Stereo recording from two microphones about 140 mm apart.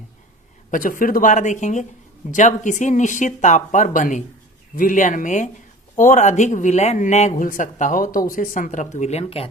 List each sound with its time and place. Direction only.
0.7 s speech: 80° left; by 9.5 s 45° left (ahead or behind)